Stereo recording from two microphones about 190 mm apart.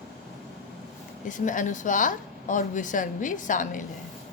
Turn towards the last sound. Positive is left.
turn(degrees=45)  # may be behind; listen again after turning